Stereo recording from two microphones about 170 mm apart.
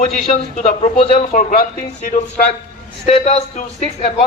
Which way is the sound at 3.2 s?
40° left (ahead or behind).